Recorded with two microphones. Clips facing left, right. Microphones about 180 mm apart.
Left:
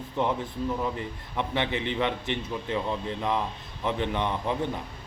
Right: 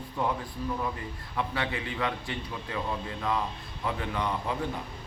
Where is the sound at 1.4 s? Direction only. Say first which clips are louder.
Left 3 dB; 25° left (ahead or behind).